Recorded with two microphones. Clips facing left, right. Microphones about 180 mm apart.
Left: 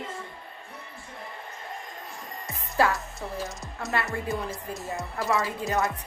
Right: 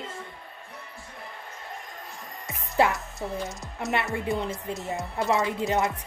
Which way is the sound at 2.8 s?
20° right (ahead or behind).